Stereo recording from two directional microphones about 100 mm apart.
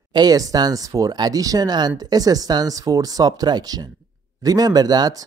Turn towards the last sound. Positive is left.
turn(degrees=-40)  # may be behind; listen again after turning